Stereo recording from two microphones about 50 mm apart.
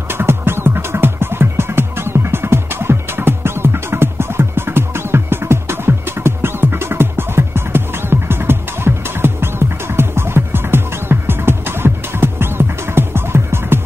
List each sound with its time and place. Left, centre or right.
0.1 s music: right